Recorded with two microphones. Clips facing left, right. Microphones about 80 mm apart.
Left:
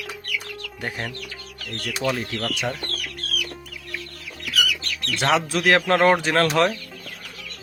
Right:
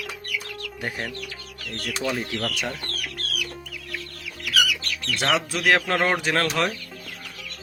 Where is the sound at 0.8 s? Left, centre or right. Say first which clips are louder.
Left 1 dB; centre.